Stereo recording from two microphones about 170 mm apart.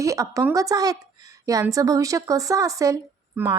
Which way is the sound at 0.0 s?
20° right (ahead or behind).